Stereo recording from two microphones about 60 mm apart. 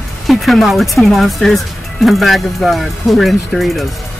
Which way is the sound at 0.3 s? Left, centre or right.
Centre.